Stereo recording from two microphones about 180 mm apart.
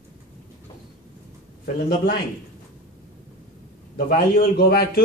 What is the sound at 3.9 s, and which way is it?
A man's voice, 55° left (ahead or behind).